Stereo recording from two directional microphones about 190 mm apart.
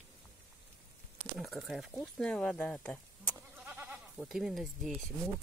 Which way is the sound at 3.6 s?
10° right (ahead or behind).